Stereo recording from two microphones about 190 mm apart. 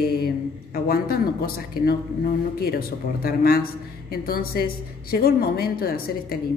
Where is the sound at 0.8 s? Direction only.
50° left (ahead or behind).